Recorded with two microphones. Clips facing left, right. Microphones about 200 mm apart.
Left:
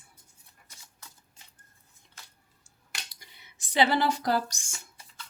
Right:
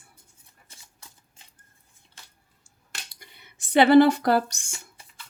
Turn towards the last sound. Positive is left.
turn(degrees=-60)  # may be behind; listen again after turning